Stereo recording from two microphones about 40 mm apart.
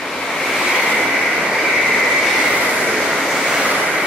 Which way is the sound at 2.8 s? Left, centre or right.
Centre.